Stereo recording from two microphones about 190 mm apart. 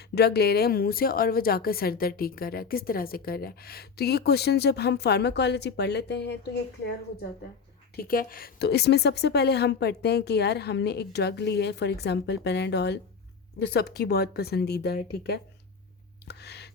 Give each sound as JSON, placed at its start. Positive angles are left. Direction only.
{"t": 0.1, "sound": "a woman's voice", "side_deg": 55}
{"t": 7.9, "sound": "a woman's voice", "side_deg": 50}
{"t": 16.2, "sound": "a sound", "side_deg": 60}